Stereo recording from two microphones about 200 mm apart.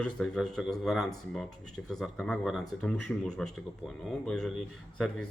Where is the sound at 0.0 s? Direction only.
5° left (ahead or behind).